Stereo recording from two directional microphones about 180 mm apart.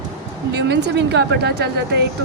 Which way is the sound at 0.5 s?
75° right (ahead or behind).